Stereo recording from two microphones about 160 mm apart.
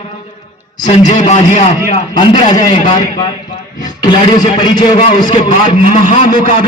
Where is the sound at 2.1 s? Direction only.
30° left (ahead or behind).